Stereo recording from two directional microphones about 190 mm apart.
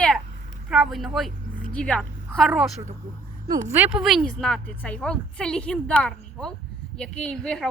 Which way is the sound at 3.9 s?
Centre (ahead or behind).